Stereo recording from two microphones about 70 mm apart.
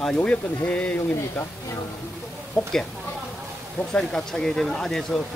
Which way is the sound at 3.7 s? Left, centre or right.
Centre.